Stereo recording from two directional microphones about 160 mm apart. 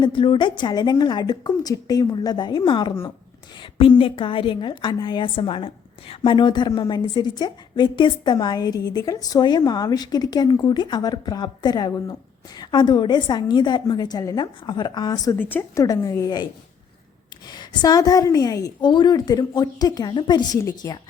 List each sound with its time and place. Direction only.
0.0 s a woman's voice: 30° left (ahead or behind)
15.4 s a woman's voice: 10° left (ahead or behind)
17.5 s a woman's voice: 25° left (ahead or behind)